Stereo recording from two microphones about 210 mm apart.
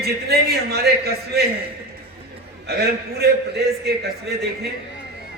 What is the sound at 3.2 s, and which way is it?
Speech, 50° right (ahead or behind).